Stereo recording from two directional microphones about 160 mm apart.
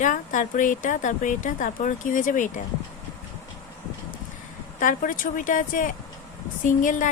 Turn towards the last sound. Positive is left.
turn(degrees=55)  # may be behind; listen again after turning